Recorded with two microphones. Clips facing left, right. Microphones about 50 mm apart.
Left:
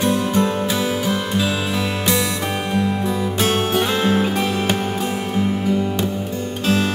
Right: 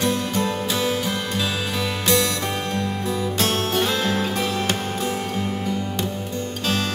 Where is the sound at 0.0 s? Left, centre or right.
Left.